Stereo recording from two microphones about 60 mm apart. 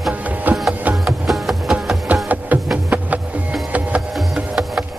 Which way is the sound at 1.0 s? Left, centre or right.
Centre.